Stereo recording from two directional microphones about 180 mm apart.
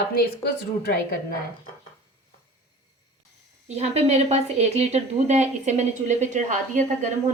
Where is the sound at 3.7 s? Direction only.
35° right (ahead or behind).